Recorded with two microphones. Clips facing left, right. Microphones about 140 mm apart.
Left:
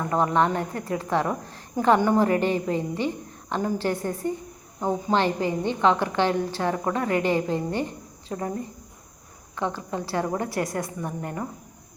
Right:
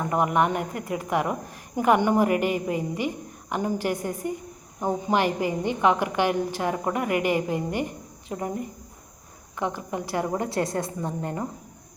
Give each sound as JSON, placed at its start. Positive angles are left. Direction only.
{"t": 0.0, "sound": "a woman's voice", "side_deg": -15}